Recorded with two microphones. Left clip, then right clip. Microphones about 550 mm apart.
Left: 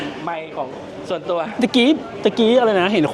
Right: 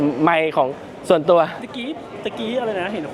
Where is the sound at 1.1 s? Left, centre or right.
Right.